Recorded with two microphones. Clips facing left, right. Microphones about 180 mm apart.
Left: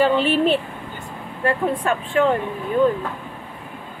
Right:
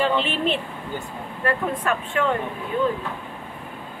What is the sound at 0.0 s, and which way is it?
Speech, 40° left (ahead or behind).